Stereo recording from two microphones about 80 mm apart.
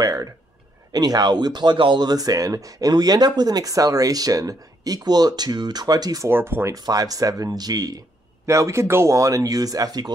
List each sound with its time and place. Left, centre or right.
0.0 s a sound: right
0.9 s speech: right
6.2 s speech: right
6.7 s speech: right
8.5 s speech: right